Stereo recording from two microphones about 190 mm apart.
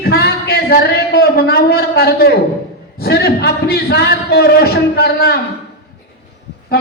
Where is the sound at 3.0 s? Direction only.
55° left (ahead or behind).